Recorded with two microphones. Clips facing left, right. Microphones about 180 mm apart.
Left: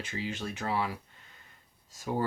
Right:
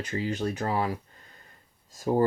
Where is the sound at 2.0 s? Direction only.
40° right (ahead or behind).